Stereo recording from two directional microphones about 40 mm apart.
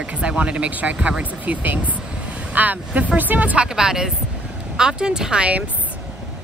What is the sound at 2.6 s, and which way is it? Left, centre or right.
Speech, right.